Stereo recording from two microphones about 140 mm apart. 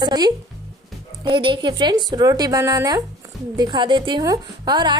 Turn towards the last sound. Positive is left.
turn(degrees=-30)  # may be behind; listen again after turning